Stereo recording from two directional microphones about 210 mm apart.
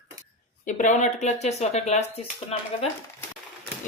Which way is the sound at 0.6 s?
35° left (ahead or behind).